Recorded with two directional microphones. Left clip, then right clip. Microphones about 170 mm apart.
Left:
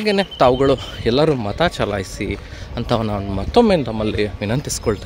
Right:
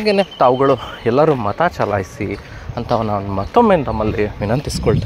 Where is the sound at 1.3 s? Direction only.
25° left (ahead or behind).